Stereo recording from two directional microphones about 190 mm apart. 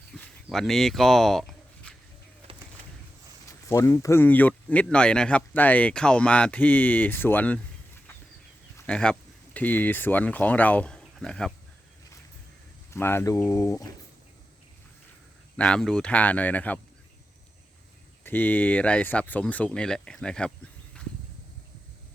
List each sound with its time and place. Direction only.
0.1 s a sound: 5° left (ahead or behind)
3.7 s speech: 15° left (ahead or behind)
8.9 s speech: 5° left (ahead or behind)
12.9 s speech: 10° left (ahead or behind)
15.5 s speech: 5° left (ahead or behind)
18.2 s speech: 10° left (ahead or behind)